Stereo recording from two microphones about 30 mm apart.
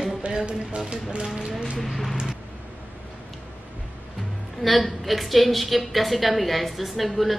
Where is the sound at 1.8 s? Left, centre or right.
Centre.